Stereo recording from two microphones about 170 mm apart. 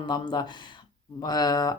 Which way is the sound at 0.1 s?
25° left (ahead or behind).